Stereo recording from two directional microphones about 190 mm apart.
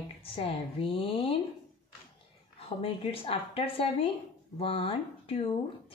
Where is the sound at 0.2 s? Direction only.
30° left (ahead or behind).